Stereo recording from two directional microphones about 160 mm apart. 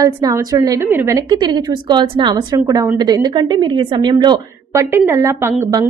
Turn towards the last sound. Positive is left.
turn(degrees=-20)  # may be behind; listen again after turning